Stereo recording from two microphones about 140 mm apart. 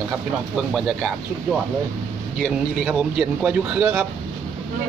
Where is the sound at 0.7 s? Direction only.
Centre (ahead or behind).